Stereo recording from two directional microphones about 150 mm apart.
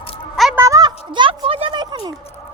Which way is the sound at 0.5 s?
20° right (ahead or behind).